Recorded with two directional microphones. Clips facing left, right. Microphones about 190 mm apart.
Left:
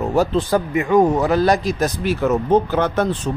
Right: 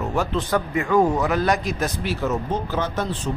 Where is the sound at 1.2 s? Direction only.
35° left (ahead or behind).